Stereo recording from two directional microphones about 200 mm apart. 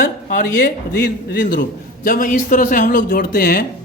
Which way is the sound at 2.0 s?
45° left (ahead or behind).